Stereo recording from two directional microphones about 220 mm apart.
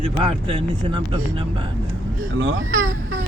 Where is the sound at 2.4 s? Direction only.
60° right (ahead or behind).